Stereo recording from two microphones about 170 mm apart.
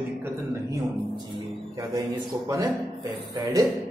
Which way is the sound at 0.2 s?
20° right (ahead or behind).